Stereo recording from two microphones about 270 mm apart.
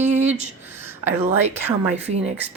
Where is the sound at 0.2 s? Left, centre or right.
Right.